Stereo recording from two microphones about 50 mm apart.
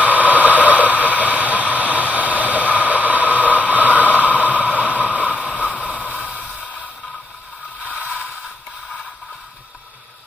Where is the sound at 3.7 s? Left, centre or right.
Right.